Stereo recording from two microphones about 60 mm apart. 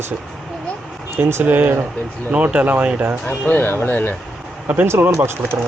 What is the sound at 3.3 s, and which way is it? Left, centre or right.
Speech, left.